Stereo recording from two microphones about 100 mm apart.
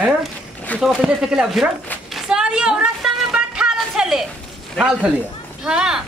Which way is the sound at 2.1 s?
5° right (ahead or behind).